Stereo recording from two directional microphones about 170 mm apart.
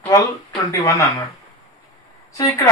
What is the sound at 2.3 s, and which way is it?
Speech, 20° left (ahead or behind).